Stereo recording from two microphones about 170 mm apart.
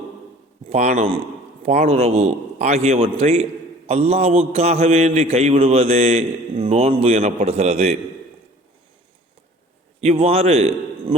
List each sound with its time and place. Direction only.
0.7 s a man's voice: 40° right (ahead or behind)
10.0 s a man's voice: 40° right (ahead or behind)